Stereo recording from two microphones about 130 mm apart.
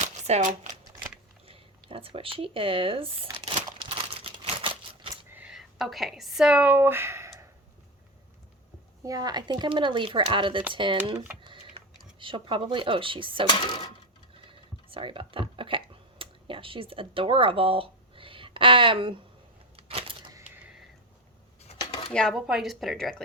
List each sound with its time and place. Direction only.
0.0 s shuffling cards: 60° right (ahead or behind)
0.9 s a sound: 15° right (ahead or behind)
1.5 s speech: 45° right (ahead or behind)
3.3 s crumpling: 40° right (ahead or behind)
5.3 s speech: 10° right (ahead or behind)
9.0 s speech: 30° right (ahead or behind)
11.4 s a sound: 45° right (ahead or behind)
12.2 s speech: 40° right (ahead or behind)
13.5 s speech: 35° left (ahead or behind)
14.4 s a sound: 45° right (ahead or behind)
19.7 s typewriter: 45° right (ahead or behind)
22.1 s speech: 5° left (ahead or behind)